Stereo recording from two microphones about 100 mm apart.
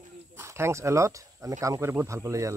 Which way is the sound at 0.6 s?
30° right (ahead or behind).